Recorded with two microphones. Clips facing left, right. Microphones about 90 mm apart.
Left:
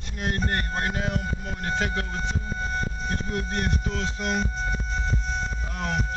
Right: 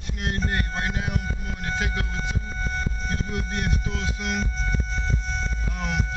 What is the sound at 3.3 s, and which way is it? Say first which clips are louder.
Music: left 1 dB; 5° right (ahead or behind).